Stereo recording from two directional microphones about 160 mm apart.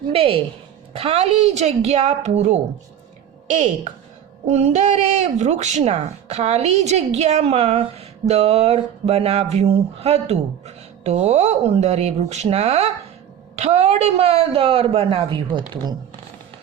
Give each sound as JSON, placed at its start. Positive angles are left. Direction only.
{"t": 0.1, "sound": "speech", "side_deg": -35}